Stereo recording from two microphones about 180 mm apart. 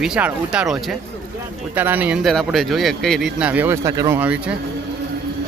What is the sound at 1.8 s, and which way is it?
Speech, 10° right (ahead or behind).